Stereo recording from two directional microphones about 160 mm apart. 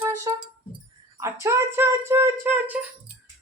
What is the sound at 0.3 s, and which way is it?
Music, 20° right (ahead or behind).